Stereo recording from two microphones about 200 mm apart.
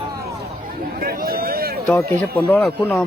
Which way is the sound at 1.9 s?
15° left (ahead or behind).